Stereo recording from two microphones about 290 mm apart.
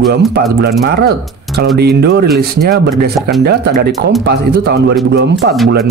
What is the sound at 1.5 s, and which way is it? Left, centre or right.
Speech, right.